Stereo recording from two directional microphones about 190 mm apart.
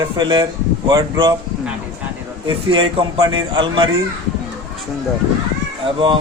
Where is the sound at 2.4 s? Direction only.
25° right (ahead or behind).